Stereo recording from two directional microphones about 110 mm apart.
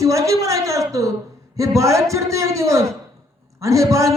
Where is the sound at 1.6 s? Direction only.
30° right (ahead or behind).